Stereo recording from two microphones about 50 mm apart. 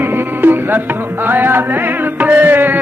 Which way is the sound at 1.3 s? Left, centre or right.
Right.